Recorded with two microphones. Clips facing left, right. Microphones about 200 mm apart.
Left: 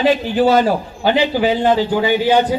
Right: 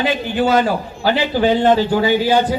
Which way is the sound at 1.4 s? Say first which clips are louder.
Right 5 dB; 10° left (ahead or behind).